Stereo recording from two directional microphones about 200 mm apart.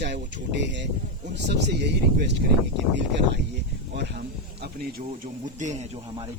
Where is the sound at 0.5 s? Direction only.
60° right (ahead or behind).